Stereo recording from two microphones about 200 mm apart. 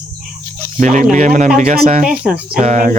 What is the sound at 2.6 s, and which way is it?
Speech, 40° right (ahead or behind).